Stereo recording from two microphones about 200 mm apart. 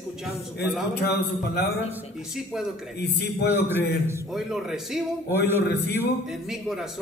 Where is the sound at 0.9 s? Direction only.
55° left (ahead or behind).